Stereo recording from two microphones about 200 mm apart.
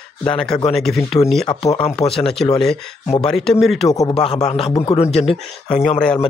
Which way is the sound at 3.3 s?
Centre (ahead or behind).